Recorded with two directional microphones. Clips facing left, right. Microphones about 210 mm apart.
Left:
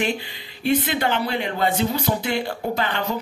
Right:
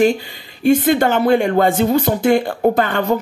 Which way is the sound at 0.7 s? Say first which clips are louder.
Right 8 dB; 45° right (ahead or behind).